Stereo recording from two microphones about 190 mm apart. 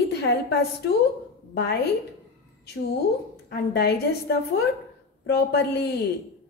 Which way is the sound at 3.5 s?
55° left (ahead or behind).